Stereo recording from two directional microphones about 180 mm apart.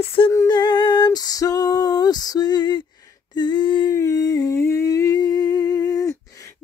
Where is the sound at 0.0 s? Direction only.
30° left (ahead or behind).